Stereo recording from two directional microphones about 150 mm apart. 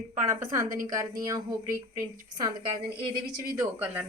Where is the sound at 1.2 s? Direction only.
20° right (ahead or behind).